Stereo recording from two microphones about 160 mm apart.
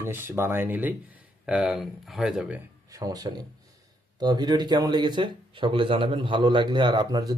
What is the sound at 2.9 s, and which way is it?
Speech, 20° right (ahead or behind).